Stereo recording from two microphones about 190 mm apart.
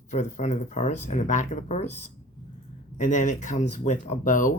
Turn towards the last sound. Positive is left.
turn(degrees=40)  # may be behind; listen again after turning